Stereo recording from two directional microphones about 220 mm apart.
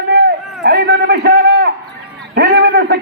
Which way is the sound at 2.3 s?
50° right (ahead or behind).